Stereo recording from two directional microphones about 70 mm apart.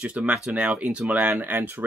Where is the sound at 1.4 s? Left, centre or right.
Right.